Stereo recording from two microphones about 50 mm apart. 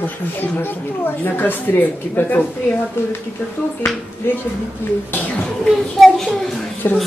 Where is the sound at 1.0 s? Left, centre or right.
Left.